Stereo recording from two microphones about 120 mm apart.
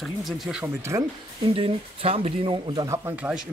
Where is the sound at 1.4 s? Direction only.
50° right (ahead or behind).